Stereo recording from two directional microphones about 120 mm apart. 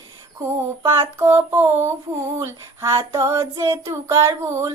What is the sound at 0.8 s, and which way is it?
Child singing, 20° right (ahead or behind).